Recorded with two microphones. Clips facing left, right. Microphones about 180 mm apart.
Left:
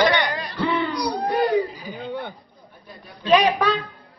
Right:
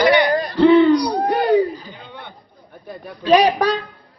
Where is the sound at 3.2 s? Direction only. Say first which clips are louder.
Right 3 dB; 35° right (ahead or behind).